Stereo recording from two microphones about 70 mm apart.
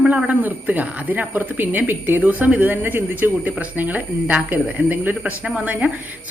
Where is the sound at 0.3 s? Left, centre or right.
Right.